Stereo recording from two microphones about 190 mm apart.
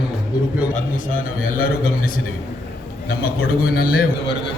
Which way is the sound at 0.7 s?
45° left (ahead or behind).